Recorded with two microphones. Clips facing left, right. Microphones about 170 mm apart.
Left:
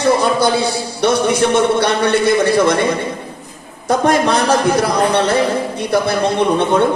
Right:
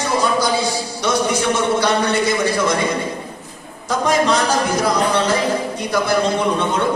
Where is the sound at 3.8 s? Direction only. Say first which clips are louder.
Left 3 dB; 60° left (ahead or behind).